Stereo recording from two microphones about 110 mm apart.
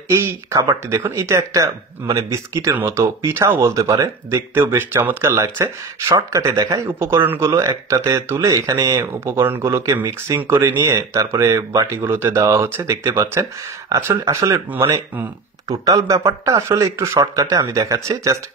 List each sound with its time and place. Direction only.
0.1 s speech: 25° right (ahead or behind)
14.7 s speech: 20° right (ahead or behind)
15.7 s speech: 30° right (ahead or behind)